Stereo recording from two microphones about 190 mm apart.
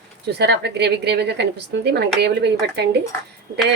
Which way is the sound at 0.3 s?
60° right (ahead or behind).